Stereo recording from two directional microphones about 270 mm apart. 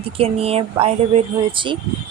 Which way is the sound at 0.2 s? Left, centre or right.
Right.